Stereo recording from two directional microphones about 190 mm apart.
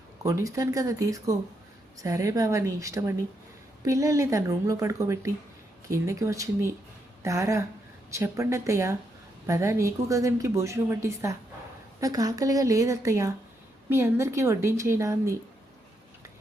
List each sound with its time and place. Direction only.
0.2 s a woman's voice: 15° right (ahead or behind)